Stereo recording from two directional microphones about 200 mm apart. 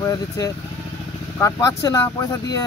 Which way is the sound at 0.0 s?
15° left (ahead or behind).